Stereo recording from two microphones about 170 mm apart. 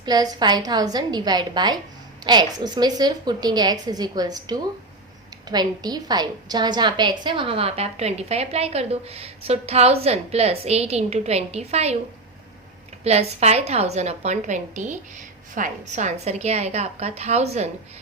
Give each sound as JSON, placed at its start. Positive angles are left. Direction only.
{"t": 0.0, "sound": "a woman's voice", "side_deg": -25}
{"t": 13.1, "sound": "a woman's voice", "side_deg": -40}